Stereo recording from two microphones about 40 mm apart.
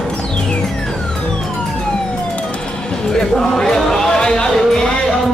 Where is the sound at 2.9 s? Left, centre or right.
Centre.